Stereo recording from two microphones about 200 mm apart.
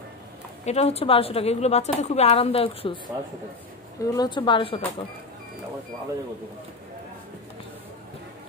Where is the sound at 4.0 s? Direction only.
20° left (ahead or behind).